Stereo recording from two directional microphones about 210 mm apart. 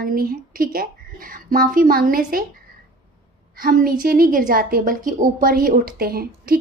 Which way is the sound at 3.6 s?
45° right (ahead or behind).